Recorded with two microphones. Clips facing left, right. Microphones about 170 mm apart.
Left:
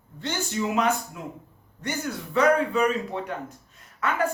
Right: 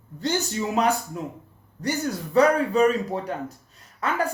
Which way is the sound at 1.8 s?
35° right (ahead or behind).